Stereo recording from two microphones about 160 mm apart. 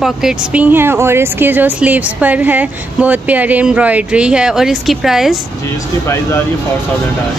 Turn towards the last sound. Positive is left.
turn(degrees=15)  # may be behind; listen again after turning